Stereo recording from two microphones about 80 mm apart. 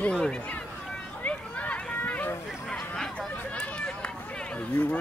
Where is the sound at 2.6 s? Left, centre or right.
Centre.